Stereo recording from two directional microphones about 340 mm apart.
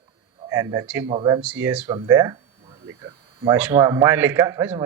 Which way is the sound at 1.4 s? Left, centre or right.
Centre.